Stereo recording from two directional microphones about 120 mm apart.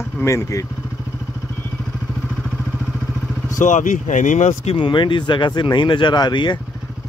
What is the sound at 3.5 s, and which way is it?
Speech, 90° left.